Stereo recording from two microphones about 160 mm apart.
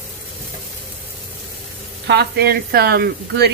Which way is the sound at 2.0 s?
85° right.